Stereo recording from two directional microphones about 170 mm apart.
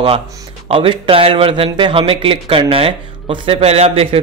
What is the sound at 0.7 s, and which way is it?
A man's voice, 30° right (ahead or behind).